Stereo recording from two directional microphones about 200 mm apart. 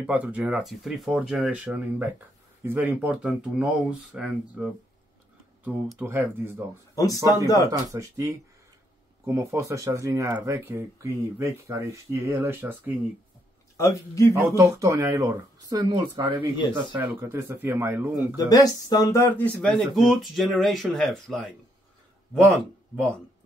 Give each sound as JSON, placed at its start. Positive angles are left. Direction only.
{"t": 0.0, "sound": "speech", "side_deg": -5}
{"t": 7.4, "sound": "speech", "side_deg": 20}
{"t": 7.7, "sound": "speech", "side_deg": -15}
{"t": 13.7, "sound": "speech", "side_deg": 15}
{"t": 14.6, "sound": "speech", "side_deg": -15}
{"t": 18.5, "sound": "speech", "side_deg": 20}